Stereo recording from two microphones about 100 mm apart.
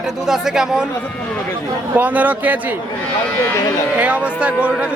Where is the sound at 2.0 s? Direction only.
15° right (ahead or behind).